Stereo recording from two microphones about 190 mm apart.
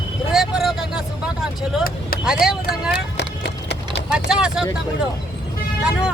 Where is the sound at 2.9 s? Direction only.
65° left (ahead or behind).